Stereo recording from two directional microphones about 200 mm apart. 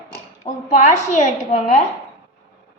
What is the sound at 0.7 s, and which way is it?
Speech, 35° left (ahead or behind).